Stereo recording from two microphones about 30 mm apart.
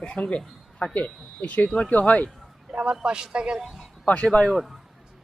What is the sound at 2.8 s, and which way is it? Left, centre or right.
Speech, right.